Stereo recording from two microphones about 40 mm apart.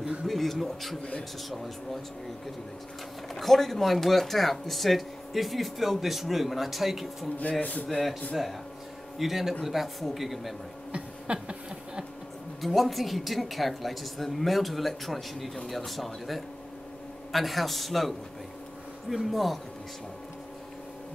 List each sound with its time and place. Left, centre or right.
0.3 s speech: centre
3.3 s speech: centre
9.2 s a man's voice: centre
10.9 s a sound: right
12.6 s speech: centre